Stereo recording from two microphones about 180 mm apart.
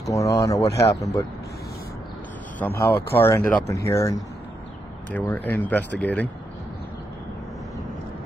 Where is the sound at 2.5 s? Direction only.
10° left (ahead or behind).